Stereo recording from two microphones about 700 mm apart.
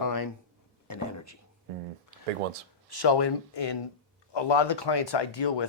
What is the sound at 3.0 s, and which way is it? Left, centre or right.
Speech, left.